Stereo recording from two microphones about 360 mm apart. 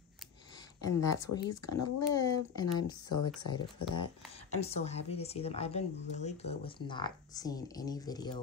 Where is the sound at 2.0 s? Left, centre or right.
Centre.